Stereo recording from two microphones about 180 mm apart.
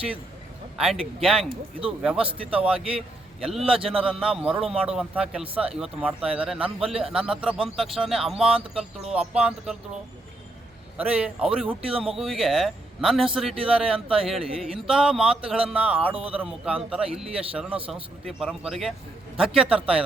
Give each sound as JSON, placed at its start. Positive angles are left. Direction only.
{"t": 0.8, "sound": "a man's voice", "side_deg": 0}
{"t": 10.9, "sound": "a man's voice", "side_deg": -5}
{"t": 17.7, "sound": "speech", "side_deg": -30}
{"t": 18.3, "sound": "a man's voice", "side_deg": -5}